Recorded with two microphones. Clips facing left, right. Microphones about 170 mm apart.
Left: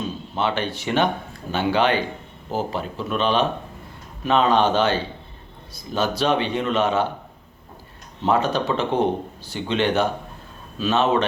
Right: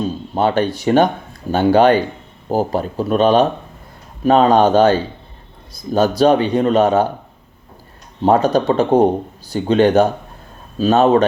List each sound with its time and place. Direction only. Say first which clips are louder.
0.0 s speech: right 7 dB; 40° right (ahead or behind)
8.2 s speech: right 7 dB; 40° right (ahead or behind)